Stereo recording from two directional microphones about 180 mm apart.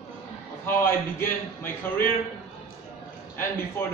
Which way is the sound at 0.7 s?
15° left (ahead or behind).